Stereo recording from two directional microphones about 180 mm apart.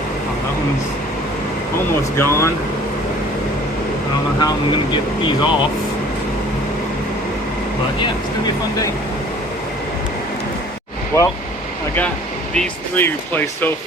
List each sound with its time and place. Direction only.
2.1 s speech: 15° left (ahead or behind)
4.4 s speech: 25° left (ahead or behind)
11.1 s speech: 15° left (ahead or behind)
12.5 s speech: 10° left (ahead or behind)